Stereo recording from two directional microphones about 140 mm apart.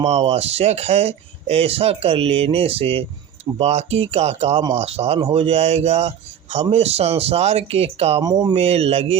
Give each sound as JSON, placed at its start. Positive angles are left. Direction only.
{"t": 0.0, "sound": "speech", "side_deg": -50}
{"t": 8.2, "sound": "speech", "side_deg": -30}
{"t": 8.5, "sound": "speech", "side_deg": -45}